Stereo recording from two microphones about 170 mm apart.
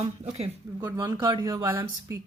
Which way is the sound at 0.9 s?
25° right (ahead or behind).